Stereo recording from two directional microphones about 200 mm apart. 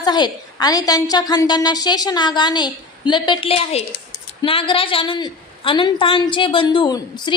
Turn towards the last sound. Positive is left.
turn(degrees=20)  # may be behind; listen again after turning